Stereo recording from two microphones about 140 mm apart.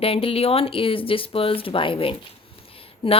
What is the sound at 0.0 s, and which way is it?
A woman's voice, 40° left (ahead or behind).